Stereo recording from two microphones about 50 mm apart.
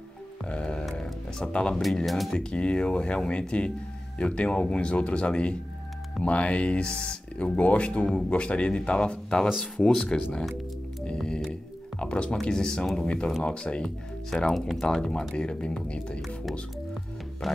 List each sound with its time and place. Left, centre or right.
0.5 s music: centre
1.8 s speech: centre
2.3 s speech: left
11.1 s music: centre
12.0 s speech: left
13.8 s speech: centre; by 16.2 s left